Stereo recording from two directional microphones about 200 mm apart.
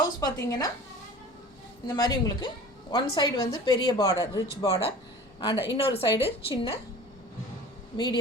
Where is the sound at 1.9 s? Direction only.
20° left (ahead or behind).